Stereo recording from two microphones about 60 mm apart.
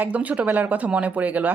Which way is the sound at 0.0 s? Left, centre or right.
Right.